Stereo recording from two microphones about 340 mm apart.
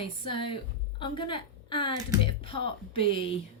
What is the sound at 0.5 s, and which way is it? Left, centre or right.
A woman's voice, centre.